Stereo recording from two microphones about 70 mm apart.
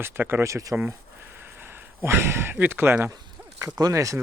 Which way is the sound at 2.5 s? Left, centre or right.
Right.